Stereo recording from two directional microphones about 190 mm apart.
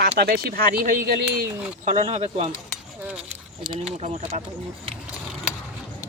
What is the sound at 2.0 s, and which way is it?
Speech, 35° right (ahead or behind).